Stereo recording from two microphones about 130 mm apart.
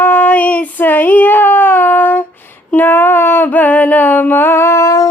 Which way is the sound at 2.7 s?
15° left (ahead or behind).